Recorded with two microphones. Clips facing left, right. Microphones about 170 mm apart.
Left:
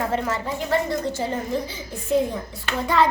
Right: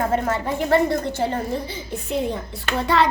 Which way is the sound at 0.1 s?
55° right (ahead or behind).